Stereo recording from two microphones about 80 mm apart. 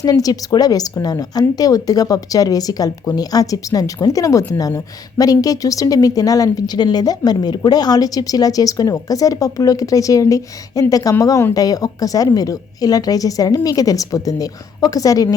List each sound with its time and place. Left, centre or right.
0.0 s speech: left